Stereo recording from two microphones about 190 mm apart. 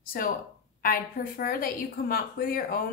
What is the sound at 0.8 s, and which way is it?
A woman's voice, 45° left (ahead or behind).